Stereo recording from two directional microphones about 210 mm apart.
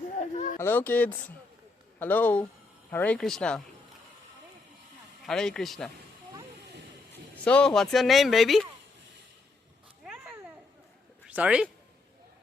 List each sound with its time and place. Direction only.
0.3 s a sound: 35° left (ahead or behind)
0.6 s speech: 10° left (ahead or behind)
5.2 s speech: centre (ahead or behind)
7.1 s speech: 5° left (ahead or behind)
10.0 s a sound: 5° right (ahead or behind)
11.3 s speech: 5° right (ahead or behind)